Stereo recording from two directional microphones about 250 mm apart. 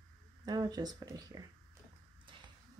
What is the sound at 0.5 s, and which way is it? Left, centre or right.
Speech, centre.